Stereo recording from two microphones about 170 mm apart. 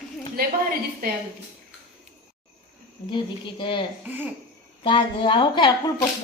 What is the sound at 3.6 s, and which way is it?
Speech, 30° left (ahead or behind).